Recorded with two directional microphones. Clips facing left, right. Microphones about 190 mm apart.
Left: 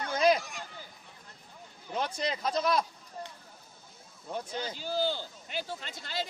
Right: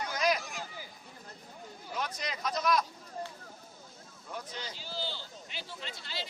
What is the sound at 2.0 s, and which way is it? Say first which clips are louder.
Speech: left 5 dB; 30° left (ahead or behind).